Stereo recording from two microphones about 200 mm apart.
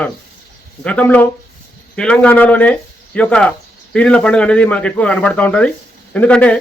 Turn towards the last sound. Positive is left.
turn(degrees=5)  # may be behind; listen again after turning